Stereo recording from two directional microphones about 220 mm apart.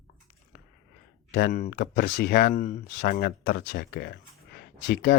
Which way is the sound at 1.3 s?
40° left (ahead or behind).